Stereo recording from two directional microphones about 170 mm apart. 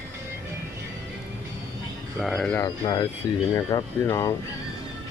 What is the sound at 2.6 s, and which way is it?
Speech, 25° left (ahead or behind).